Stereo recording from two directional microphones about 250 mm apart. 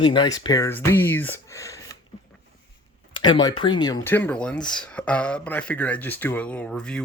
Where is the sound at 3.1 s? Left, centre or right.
Centre.